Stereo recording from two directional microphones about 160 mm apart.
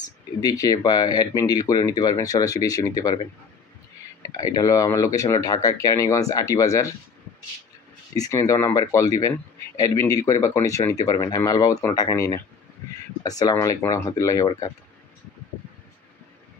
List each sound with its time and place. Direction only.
0.4 s speech: 25° left (ahead or behind)
4.4 s speech: 20° left (ahead or behind)
8.2 s speech: 20° left (ahead or behind)